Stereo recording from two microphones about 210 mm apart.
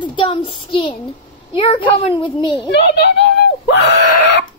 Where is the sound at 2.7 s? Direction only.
55° left (ahead or behind).